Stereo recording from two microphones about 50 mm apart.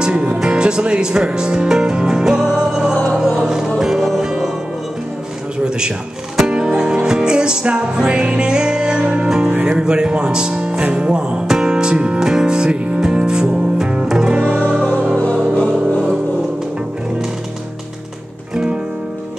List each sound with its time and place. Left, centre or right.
0.0 s music: centre
6.5 s music: centre
9.7 s music: centre
15.5 s music: left
18.5 s music: centre